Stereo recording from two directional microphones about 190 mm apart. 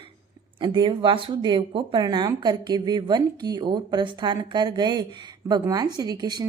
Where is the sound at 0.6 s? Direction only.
25° right (ahead or behind).